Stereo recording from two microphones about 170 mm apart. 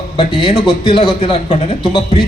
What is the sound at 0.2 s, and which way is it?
A man's voice, 30° left (ahead or behind).